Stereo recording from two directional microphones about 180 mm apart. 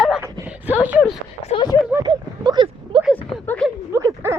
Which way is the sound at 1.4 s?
30° left (ahead or behind).